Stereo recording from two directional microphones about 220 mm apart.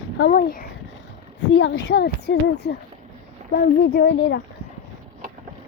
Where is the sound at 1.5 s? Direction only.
60° left (ahead or behind).